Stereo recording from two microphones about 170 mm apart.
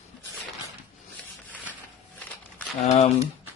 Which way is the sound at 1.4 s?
10° left (ahead or behind).